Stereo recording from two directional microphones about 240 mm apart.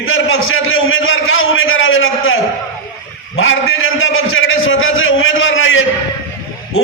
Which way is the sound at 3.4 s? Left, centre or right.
Left.